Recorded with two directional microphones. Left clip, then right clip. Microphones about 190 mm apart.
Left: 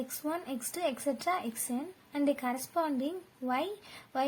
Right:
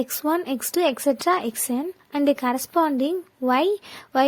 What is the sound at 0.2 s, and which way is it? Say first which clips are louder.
A woman's voice: right 12 dB; 50° right (ahead or behind).